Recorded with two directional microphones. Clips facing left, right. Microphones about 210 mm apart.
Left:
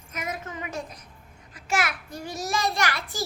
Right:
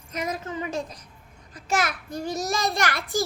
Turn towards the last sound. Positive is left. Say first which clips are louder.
# right 3 dB
turn(degrees=-50)  # may be behind; listen again after turning